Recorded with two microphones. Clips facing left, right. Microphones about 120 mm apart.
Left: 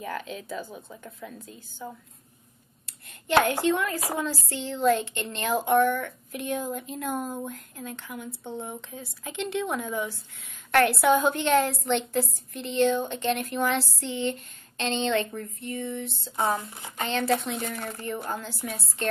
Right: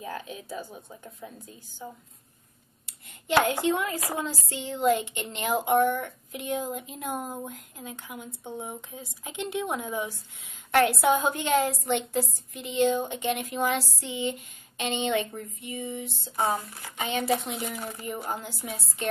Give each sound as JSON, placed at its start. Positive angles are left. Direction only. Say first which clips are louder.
{"t": 2.9, "sound": "a sound", "louder": "left 1 dB", "side_deg": -15}
{"t": 3.4, "sound": "a woman's voice", "louder": "left 1 dB", "side_deg": -20}
{"t": 16.5, "sound": "speech", "louder": "left 1 dB", "side_deg": 20}
{"t": 16.9, "sound": "speech", "louder": "left 1 dB", "side_deg": -15}